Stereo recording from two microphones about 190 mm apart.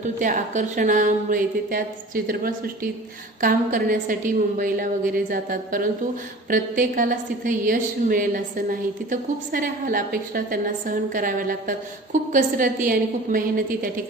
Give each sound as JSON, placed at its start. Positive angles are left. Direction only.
{"t": 0.0, "sound": "a woman's voice", "side_deg": -40}